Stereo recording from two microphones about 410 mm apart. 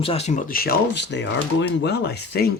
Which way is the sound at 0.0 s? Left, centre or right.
Centre.